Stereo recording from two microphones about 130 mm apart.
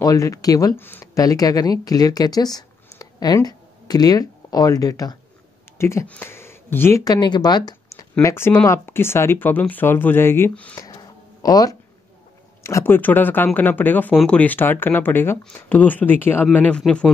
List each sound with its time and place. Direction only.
0.0 s speech: 25° left (ahead or behind)
1.1 s speech: 25° left (ahead or behind)
7.1 s speech: 35° left (ahead or behind); by 10.8 s 10° left (ahead or behind)
10.8 s a sound: 30° left (ahead or behind)
12.6 s speech: 20° left (ahead or behind)